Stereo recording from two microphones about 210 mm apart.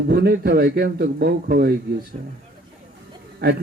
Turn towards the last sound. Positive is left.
turn(degrees=-50)  # may be behind; listen again after turning